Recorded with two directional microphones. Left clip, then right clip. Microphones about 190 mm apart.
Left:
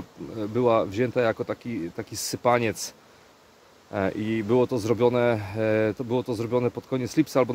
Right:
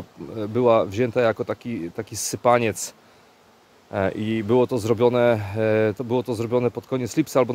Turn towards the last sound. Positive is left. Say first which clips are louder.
# right 2 dB
turn(degrees=-35)  # may be behind; listen again after turning